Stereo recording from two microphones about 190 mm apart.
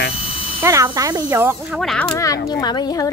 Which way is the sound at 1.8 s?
Centre (ahead or behind).